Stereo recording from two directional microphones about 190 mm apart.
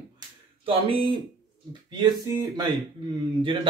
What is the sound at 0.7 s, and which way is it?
Speech, 30° right (ahead or behind).